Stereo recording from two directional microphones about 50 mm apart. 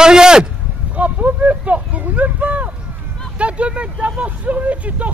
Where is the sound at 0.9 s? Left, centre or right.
Right.